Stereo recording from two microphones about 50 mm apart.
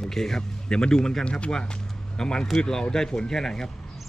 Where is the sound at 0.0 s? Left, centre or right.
Centre.